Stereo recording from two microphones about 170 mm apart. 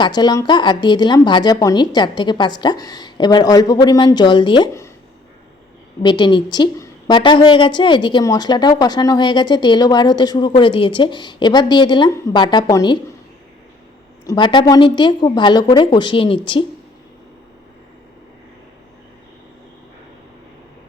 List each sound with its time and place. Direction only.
0.0 s a woman's voice: 25° left (ahead or behind)
6.0 s a woman's voice: 25° left (ahead or behind)
14.3 s a woman's voice: 30° left (ahead or behind)